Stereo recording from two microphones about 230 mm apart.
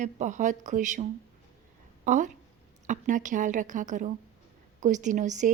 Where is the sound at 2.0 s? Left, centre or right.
Right.